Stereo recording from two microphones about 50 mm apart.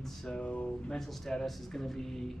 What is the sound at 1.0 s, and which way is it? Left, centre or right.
Speech, centre.